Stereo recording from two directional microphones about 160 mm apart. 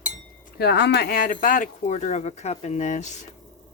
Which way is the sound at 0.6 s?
90° left.